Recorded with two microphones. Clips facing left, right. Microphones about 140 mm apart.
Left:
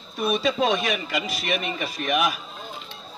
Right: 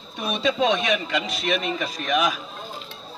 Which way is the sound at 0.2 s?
Centre (ahead or behind).